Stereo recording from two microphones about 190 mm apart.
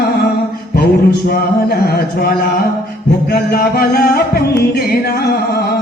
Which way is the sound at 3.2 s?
55° left (ahead or behind).